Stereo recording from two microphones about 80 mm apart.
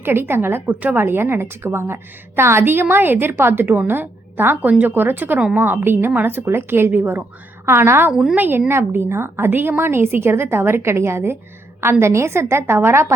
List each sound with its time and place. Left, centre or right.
0.0 s a woman's voice: right
0.7 s a woman's voice: right